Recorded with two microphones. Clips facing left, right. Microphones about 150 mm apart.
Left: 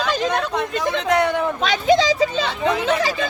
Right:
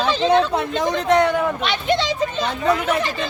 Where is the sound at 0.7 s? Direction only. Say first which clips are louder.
Right 2 dB; 20° right (ahead or behind).